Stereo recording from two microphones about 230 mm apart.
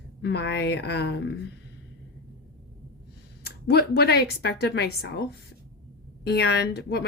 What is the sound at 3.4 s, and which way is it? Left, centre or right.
Speech, left.